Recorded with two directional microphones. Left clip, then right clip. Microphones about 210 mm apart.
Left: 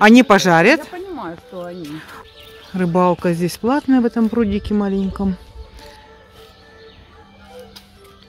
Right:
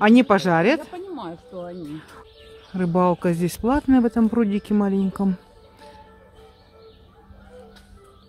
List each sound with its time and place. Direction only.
0.0 s speech: 10° left (ahead or behind)